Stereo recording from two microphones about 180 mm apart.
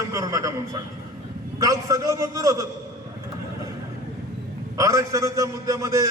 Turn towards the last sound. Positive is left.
turn(degrees=-15)  # may be behind; listen again after turning